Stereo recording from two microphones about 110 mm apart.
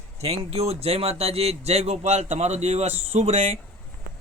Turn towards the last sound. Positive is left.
turn(degrees=-70)  # may be behind; listen again after turning